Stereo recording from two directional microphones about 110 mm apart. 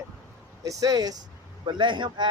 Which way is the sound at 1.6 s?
45° right (ahead or behind).